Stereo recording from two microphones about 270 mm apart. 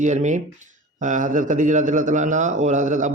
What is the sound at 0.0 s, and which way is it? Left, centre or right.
A man's voice, right.